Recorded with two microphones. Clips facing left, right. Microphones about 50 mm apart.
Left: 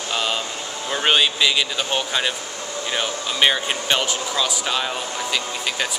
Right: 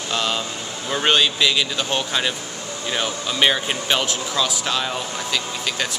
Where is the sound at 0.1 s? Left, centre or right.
Centre.